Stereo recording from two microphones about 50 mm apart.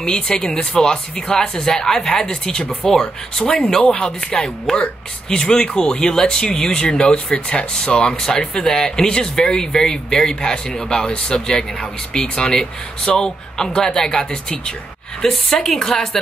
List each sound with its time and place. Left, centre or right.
0.0 s speech: centre